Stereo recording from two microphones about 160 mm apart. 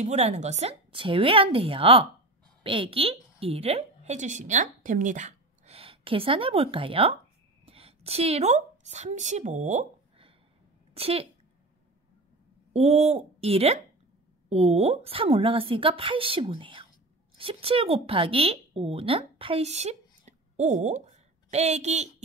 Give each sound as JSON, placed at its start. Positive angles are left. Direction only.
{"t": 0.0, "sound": "a woman's voice", "side_deg": -45}
{"t": 5.8, "sound": "a woman's voice", "side_deg": -35}
{"t": 12.7, "sound": "a woman's voice", "side_deg": -40}